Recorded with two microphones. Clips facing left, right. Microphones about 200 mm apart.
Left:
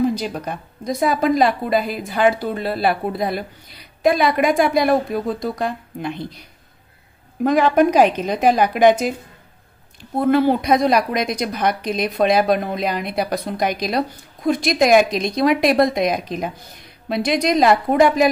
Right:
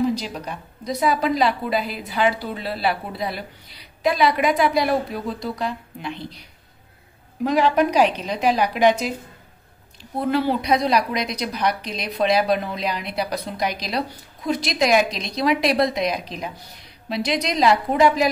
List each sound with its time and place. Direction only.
0.0 s a woman's voice: 50° left (ahead or behind)
7.4 s a woman's voice: 50° left (ahead or behind)
10.3 s a woman's voice: 50° left (ahead or behind)